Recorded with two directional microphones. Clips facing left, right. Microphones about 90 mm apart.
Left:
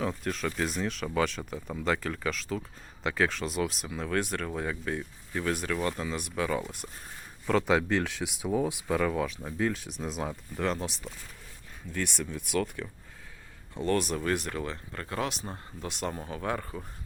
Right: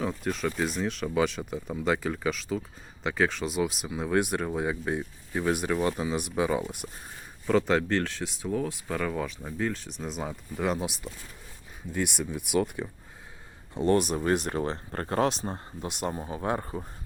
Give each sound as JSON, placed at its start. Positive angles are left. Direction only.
{"t": 0.0, "sound": "speech", "side_deg": 0}
{"t": 7.4, "sound": "speech", "side_deg": 0}
{"t": 9.0, "sound": "speech", "side_deg": 0}
{"t": 14.6, "sound": "speech", "side_deg": -35}
{"t": 15.9, "sound": "speech", "side_deg": -15}